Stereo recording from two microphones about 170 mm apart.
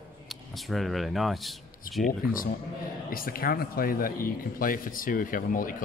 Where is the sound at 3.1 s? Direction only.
60° left (ahead or behind).